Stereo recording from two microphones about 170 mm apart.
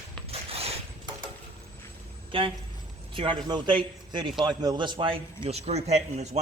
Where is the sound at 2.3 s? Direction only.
30° right (ahead or behind).